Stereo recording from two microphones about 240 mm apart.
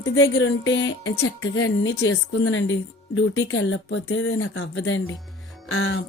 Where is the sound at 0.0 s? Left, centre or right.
Left.